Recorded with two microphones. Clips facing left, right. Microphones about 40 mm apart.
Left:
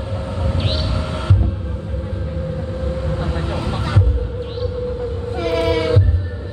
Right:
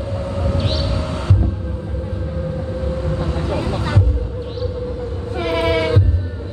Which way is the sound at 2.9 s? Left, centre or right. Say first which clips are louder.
Even; centre.